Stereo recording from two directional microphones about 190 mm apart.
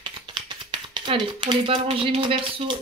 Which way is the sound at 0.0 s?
25° right (ahead or behind).